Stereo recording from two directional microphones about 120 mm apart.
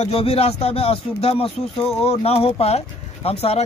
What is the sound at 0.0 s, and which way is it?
Speech, 55° left (ahead or behind).